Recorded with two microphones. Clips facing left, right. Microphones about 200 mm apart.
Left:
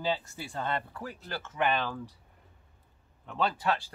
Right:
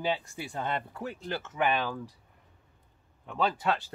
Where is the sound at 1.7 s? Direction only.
10° right (ahead or behind).